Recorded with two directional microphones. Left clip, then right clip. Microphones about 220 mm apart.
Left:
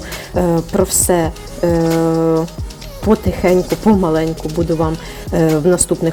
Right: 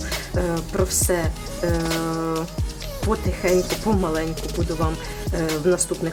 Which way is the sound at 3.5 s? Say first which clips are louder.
Left 7 dB; centre (ahead or behind).